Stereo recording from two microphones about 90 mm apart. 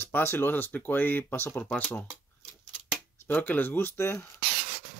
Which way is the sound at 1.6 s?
15° left (ahead or behind).